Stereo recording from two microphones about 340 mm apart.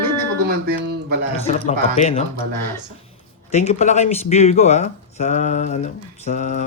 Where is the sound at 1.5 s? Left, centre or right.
Centre.